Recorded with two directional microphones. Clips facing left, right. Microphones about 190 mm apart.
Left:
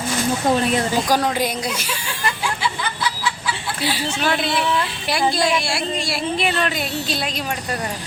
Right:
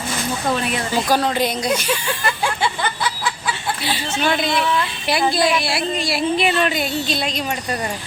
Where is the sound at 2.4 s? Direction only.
55° right (ahead or behind).